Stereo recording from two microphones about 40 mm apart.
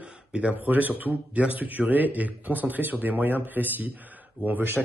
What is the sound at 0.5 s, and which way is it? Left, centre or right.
Speech, right.